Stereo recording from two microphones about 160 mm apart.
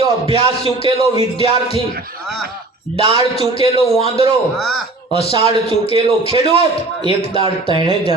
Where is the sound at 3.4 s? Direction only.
40° left (ahead or behind).